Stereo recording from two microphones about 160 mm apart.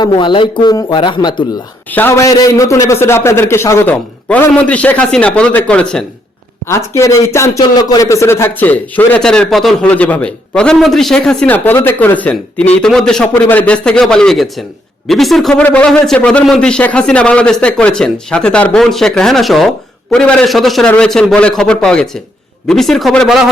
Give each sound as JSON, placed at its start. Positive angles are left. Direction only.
{"t": 0.0, "sound": "speech", "side_deg": 30}
{"t": 1.9, "sound": "speech", "side_deg": 15}
{"t": 6.7, "sound": "a man's voice", "side_deg": 20}